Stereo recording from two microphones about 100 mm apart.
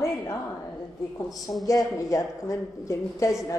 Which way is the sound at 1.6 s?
35° left (ahead or behind).